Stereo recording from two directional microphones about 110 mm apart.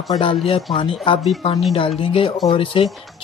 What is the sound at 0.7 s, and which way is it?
Speech, 55° left (ahead or behind).